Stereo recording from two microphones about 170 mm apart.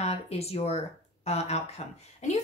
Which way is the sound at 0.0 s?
40° left (ahead or behind).